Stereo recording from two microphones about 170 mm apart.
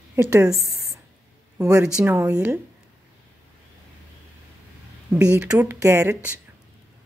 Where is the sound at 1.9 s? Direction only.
10° right (ahead or behind).